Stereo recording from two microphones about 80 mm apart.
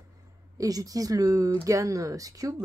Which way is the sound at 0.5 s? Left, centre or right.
Right.